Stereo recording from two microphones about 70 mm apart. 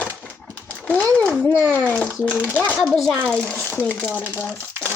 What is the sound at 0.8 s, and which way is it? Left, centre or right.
Speech, centre.